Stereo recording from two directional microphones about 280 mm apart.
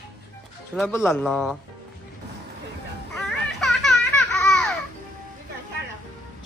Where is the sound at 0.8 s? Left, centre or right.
Centre.